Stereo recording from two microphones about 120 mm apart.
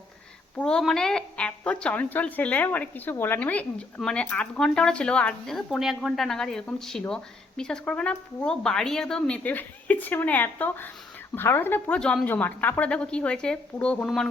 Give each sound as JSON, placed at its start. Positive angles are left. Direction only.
{"t": 0.5, "sound": "a woman's voice", "side_deg": 5}